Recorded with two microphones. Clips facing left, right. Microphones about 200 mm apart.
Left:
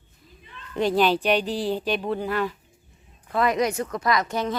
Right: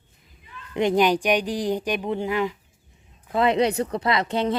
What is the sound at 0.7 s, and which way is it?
Speech, 15° right (ahead or behind).